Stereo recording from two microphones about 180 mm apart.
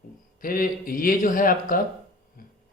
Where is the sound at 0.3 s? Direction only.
50° left (ahead or behind).